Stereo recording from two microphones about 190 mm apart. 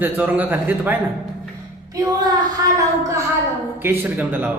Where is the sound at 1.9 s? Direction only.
20° right (ahead or behind).